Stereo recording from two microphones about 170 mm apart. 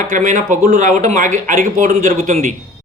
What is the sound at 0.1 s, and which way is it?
Speech, 50° right (ahead or behind).